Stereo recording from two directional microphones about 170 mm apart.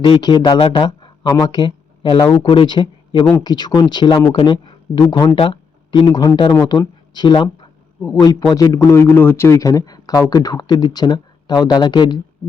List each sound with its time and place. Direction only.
0.0 s a man's voice: 25° left (ahead or behind)